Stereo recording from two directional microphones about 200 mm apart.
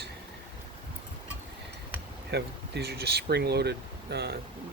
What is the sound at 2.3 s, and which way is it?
Speech, 55° right (ahead or behind).